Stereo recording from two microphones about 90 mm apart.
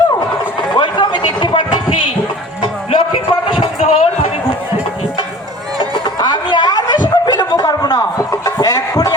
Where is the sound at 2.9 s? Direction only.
75° left (ahead or behind).